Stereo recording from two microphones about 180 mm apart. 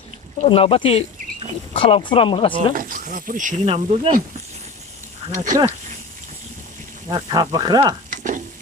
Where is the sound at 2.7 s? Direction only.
50° right (ahead or behind); by 4.1 s 35° right (ahead or behind).